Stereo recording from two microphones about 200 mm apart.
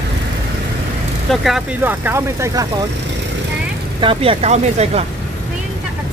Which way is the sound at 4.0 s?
25° right (ahead or behind).